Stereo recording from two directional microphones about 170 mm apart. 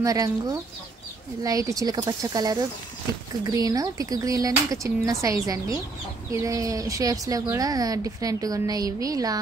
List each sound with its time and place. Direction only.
0.0 s speech: 20° right (ahead or behind)